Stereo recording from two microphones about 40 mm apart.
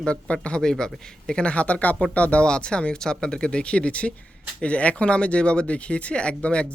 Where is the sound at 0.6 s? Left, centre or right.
Centre; by 2.5 s left.